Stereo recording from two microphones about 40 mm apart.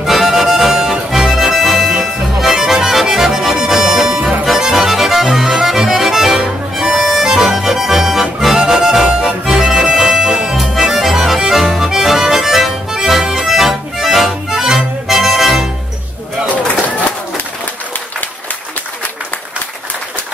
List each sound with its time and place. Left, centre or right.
0.0 s accordion: centre
6.4 s music: centre
7.2 s accordion: centre
10.6 s accordion: centre